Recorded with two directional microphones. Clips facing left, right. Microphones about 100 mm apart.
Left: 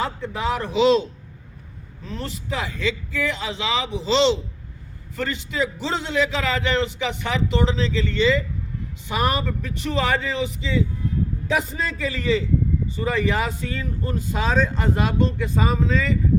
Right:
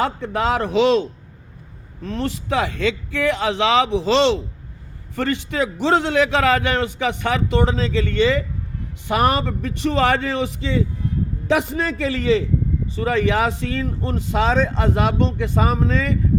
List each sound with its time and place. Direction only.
0.0 s a man's voice: 65° right (ahead or behind)
2.0 s a man's voice: 65° right (ahead or behind)